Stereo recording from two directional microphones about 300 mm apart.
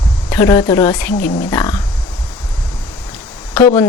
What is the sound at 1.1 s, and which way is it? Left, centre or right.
Speech, left.